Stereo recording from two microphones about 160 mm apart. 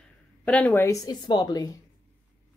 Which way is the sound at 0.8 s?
25° left (ahead or behind).